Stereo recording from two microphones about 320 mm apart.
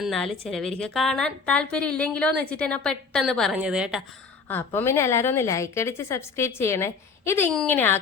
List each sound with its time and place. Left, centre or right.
0.0 s a woman's voice: centre